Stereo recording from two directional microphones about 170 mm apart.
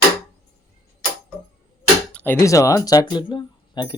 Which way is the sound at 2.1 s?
10° left (ahead or behind).